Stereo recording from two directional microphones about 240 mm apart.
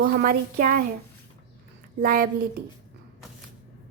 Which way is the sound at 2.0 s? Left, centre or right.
Right.